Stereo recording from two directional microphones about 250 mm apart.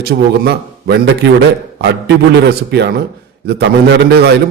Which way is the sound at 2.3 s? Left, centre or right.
Right.